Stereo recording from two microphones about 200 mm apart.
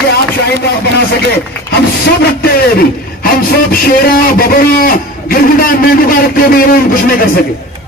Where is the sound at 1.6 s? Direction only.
50° left (ahead or behind).